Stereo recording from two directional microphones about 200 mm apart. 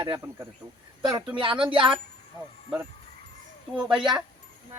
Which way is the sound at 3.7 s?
5° right (ahead or behind).